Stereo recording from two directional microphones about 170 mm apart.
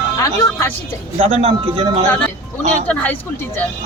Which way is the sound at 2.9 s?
10° left (ahead or behind).